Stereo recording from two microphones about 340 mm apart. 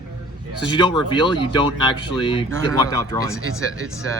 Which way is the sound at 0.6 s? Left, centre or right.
Centre.